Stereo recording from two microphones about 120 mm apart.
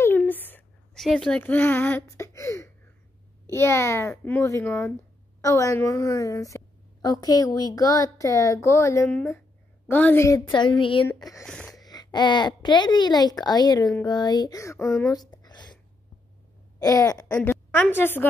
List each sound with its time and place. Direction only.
0.3 s a sound: 15° left (ahead or behind)
0.9 s speech: 5° left (ahead or behind)
1.4 s a woman's voice: 15° left (ahead or behind)
10.5 s speech: 45° left (ahead or behind)
11.1 s speech: 30° left (ahead or behind)
11.4 s a sound: 10° left (ahead or behind)
11.7 s a child's voice: 35° left (ahead or behind)
15.0 s a sound: 35° left (ahead or behind)
16.8 s a woman's voice: 30° left (ahead or behind)
17.5 s a woman's voice: 15° left (ahead or behind)